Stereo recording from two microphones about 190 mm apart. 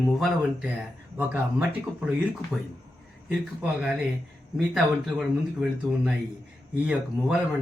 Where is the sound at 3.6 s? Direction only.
5° right (ahead or behind).